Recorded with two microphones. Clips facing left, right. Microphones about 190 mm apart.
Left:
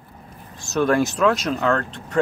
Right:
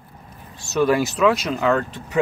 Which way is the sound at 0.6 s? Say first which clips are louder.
Even; centre (ahead or behind).